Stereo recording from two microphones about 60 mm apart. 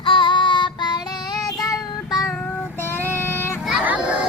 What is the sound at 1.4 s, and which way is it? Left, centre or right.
Child singing, left.